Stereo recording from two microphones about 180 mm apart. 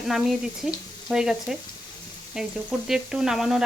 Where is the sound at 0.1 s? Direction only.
Centre (ahead or behind).